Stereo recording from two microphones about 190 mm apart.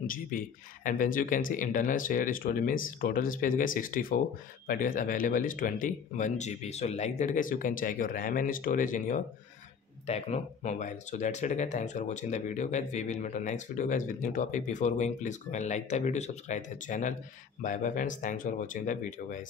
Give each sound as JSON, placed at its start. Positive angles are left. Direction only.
{"t": 0.0, "sound": "speech", "side_deg": 45}